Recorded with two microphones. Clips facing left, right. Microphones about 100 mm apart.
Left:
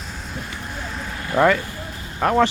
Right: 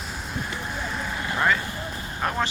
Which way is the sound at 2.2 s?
75° left (ahead or behind).